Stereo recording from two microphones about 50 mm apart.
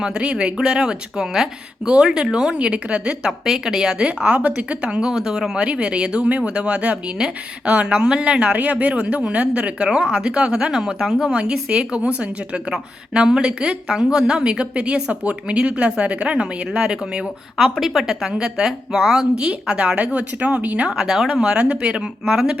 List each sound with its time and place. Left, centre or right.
0.0 s speech: right
4.9 s speech: centre
17.6 s speech: centre; by 20.9 s right
20.9 s speech: centre
21.4 s speech: centre